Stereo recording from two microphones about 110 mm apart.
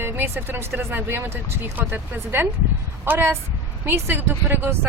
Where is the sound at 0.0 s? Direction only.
20° right (ahead or behind).